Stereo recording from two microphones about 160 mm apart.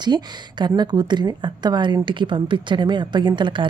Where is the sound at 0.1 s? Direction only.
25° right (ahead or behind).